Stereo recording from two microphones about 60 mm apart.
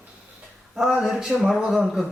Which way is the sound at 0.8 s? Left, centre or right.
Centre.